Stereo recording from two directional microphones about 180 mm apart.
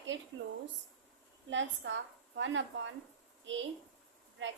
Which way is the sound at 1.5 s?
90° right.